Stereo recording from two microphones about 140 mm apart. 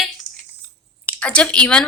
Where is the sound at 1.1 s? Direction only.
10° left (ahead or behind).